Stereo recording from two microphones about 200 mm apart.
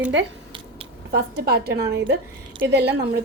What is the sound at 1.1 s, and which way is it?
A woman's voice, 50° right (ahead or behind).